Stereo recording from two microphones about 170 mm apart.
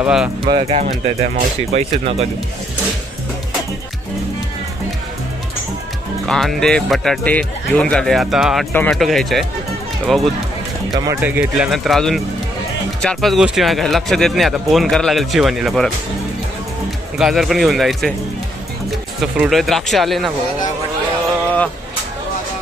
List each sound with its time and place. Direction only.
0.0 s speech: 5° right (ahead or behind)
0.5 s speech: 35° right (ahead or behind)
6.2 s speech: centre (ahead or behind)
17.2 s speech: centre (ahead or behind)